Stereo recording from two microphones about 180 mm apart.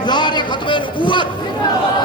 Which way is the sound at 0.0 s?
25° left (ahead or behind).